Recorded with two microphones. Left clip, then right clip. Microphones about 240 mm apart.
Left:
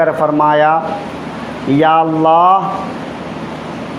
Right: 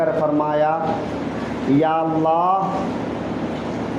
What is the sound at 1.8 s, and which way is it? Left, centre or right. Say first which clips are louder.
Speech: left 10 dB; left.